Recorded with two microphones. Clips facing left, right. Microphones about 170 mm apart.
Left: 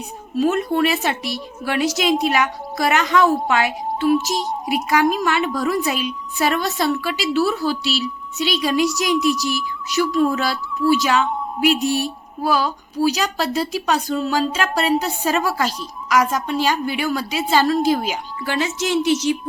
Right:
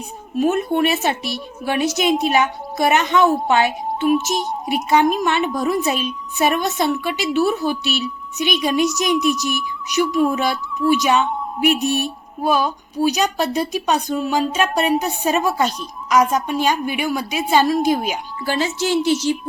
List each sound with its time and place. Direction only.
0.3 s a woman's voice: 25° right (ahead or behind)
18.4 s a woman's voice: 30° right (ahead or behind)